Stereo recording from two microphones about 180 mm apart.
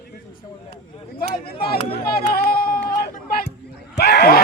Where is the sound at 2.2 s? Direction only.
60° left (ahead or behind).